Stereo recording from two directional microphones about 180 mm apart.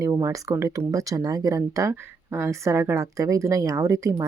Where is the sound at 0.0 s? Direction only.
15° right (ahead or behind).